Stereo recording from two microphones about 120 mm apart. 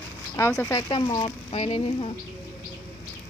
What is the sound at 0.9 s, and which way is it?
Speech, 45° left (ahead or behind).